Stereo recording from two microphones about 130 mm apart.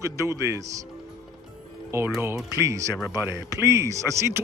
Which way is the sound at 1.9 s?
20° right (ahead or behind).